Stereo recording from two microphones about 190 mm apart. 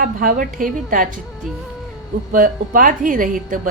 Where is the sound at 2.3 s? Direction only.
45° right (ahead or behind).